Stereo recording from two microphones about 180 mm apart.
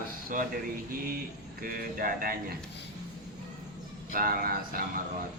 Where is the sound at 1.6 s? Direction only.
50° right (ahead or behind).